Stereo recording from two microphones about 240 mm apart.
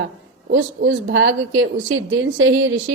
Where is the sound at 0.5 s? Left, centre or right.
Right.